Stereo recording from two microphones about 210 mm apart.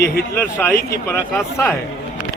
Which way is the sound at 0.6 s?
10° left (ahead or behind).